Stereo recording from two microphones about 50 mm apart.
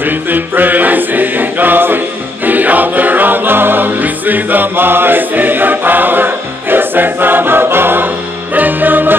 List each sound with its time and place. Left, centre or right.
0.3 s music: right